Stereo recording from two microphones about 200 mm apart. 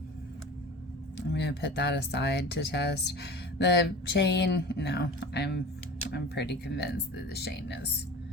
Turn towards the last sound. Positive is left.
turn(degrees=55)  # may be behind; listen again after turning